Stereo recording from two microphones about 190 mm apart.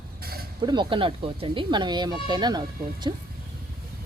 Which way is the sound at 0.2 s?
55° right (ahead or behind).